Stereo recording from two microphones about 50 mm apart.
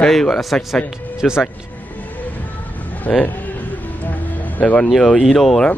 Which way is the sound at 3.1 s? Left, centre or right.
Centre.